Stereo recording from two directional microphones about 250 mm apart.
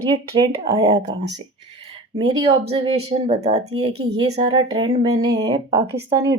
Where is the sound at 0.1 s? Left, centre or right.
Centre.